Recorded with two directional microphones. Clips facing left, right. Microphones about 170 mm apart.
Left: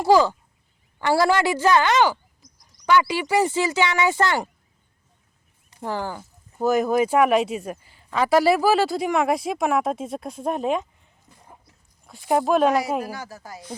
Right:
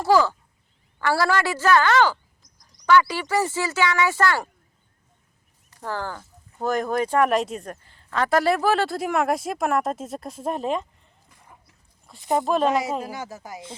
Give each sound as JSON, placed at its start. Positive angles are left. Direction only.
{"t": 0.0, "sound": "speech", "side_deg": 15}
{"t": 5.7, "sound": "speech", "side_deg": 15}
{"t": 11.3, "sound": "a sound", "side_deg": 30}
{"t": 12.0, "sound": "speech", "side_deg": 0}
{"t": 13.0, "sound": "speech", "side_deg": -20}